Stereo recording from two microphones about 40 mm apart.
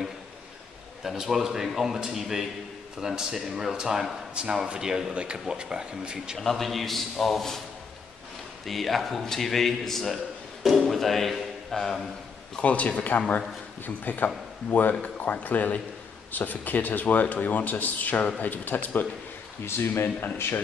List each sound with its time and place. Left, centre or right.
1.0 s speech: centre
5.1 s speech: right
6.3 s a man's voice: centre
8.6 s a man's voice: centre
12.6 s speech: left
19.6 s speech: left